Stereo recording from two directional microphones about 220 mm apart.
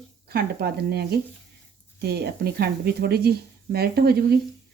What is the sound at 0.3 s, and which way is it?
Speech, 45° right (ahead or behind).